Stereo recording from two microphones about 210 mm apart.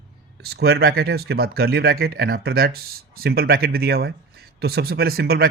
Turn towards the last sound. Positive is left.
turn(degrees=-50)  # may be behind; listen again after turning